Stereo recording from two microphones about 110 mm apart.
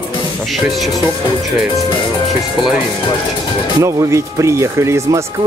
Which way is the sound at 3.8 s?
25° right (ahead or behind).